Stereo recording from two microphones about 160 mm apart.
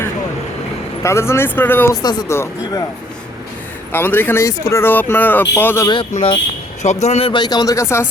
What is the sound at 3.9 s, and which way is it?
Speech, 15° left (ahead or behind).